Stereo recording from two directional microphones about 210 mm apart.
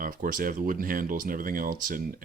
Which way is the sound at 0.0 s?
40° right (ahead or behind).